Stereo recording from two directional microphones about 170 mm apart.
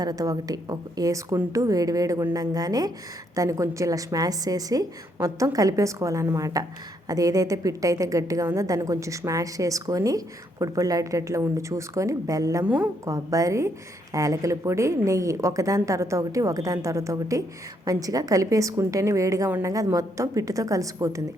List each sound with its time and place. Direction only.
0.0 s a woman's voice: 20° right (ahead or behind)
12.6 s a woman's voice: 10° right (ahead or behind)
13.1 s a woman's voice: 20° right (ahead or behind)